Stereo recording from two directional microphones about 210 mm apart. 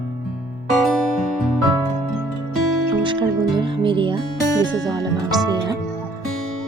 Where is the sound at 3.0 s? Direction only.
25° right (ahead or behind).